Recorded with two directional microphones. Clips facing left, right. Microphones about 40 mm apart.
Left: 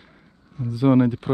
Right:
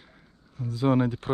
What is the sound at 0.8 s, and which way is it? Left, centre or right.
Speech, left.